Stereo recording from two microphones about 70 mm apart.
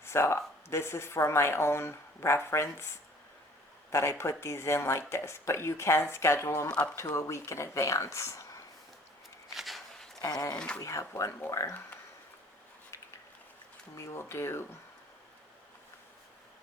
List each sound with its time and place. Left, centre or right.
0.0 s speech: left
6.7 s speech: centre
7.2 s speech: left
9.6 s walk: centre
10.2 s speech: left
10.8 s speech: left
13.9 s speech: left